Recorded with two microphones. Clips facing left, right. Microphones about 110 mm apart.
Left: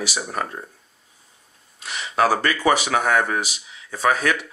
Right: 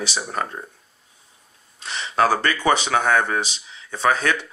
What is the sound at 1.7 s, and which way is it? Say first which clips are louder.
Speech: right 1 dB; 30° right (ahead or behind).